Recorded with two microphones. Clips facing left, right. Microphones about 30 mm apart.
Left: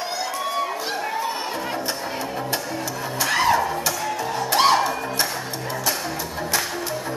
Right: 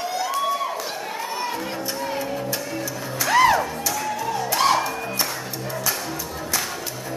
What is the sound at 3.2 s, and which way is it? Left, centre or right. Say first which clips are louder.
Music: right 2 dB; left.